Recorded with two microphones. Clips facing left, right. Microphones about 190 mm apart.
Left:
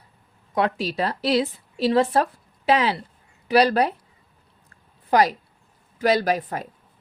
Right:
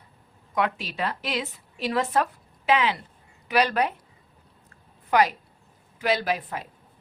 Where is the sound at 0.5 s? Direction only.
35° left (ahead or behind).